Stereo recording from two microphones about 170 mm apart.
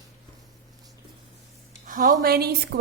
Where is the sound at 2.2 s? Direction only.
65° right (ahead or behind).